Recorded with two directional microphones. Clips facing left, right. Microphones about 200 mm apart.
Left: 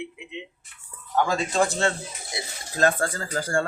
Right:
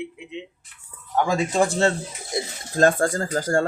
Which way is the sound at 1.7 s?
35° right (ahead or behind).